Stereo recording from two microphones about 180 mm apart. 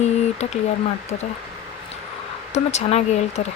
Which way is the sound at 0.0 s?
40° left (ahead or behind).